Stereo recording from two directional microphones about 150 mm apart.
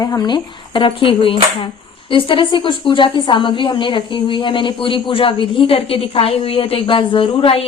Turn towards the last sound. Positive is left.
turn(degrees=40)  # may be behind; listen again after turning